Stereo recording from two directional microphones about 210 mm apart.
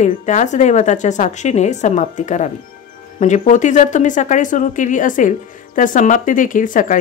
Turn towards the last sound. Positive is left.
turn(degrees=40)  # may be behind; listen again after turning